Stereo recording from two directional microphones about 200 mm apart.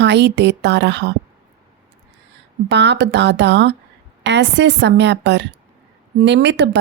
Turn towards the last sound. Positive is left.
turn(degrees=-60)  # may be behind; listen again after turning